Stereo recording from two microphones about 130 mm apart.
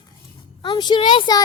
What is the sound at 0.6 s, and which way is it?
Speech, 35° left (ahead or behind).